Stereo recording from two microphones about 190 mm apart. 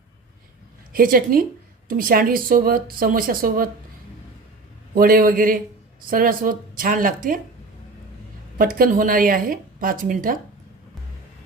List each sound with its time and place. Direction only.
0.9 s speech: 50° right (ahead or behind)
4.9 s speech: 50° right (ahead or behind)
8.5 s speech: 50° right (ahead or behind)